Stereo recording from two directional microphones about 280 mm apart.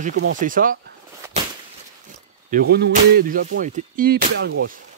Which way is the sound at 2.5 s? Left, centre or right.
Right.